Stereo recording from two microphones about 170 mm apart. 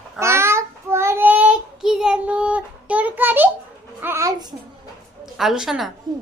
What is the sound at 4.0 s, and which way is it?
Babbling, 15° right (ahead or behind).